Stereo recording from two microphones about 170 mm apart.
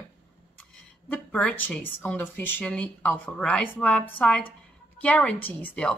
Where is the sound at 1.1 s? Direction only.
5° left (ahead or behind).